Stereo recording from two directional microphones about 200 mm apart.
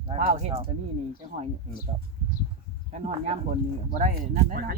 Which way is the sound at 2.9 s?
35° right (ahead or behind).